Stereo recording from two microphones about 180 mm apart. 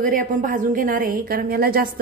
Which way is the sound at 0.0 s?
50° right (ahead or behind).